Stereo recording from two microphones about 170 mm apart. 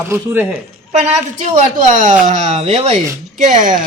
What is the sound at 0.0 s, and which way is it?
Speech, 15° right (ahead or behind).